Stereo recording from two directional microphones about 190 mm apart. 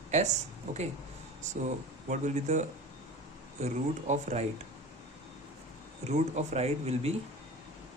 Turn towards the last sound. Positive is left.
turn(degrees=-35)  # may be behind; listen again after turning